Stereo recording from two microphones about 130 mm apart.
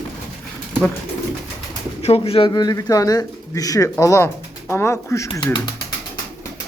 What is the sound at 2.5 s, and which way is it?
Speech, 30° left (ahead or behind).